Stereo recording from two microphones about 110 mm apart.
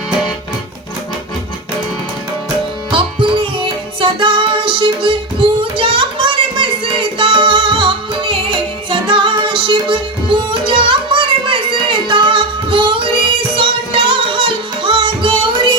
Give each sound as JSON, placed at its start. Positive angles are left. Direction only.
{"t": 2.9, "sound": "music", "side_deg": -50}
{"t": 5.7, "sound": "a sound", "side_deg": -50}
{"t": 7.2, "sound": "music", "side_deg": -50}